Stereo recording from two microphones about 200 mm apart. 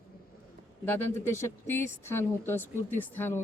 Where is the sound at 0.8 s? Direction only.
10° left (ahead or behind).